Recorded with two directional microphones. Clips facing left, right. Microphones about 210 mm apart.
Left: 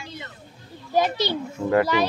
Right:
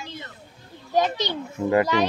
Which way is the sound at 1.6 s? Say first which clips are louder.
Right 2 dB; 5° right (ahead or behind).